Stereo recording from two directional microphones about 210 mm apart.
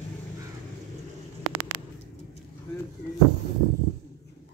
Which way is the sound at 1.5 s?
90° right.